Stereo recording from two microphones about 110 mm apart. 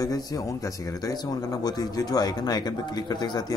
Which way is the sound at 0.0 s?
35° left (ahead or behind).